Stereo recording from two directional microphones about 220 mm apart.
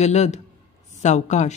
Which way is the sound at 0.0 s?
30° left (ahead or behind).